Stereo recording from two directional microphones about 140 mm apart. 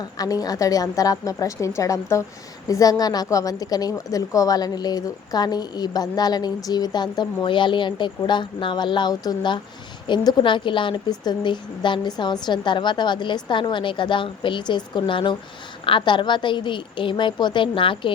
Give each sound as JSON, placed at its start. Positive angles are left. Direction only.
{"t": 0.0, "sound": "a woman's voice", "side_deg": 25}